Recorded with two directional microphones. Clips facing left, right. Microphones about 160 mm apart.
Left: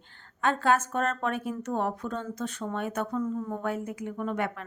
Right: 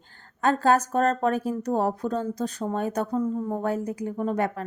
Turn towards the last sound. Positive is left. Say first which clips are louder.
# right 5 dB
turn(degrees=-40)  # may be behind; listen again after turning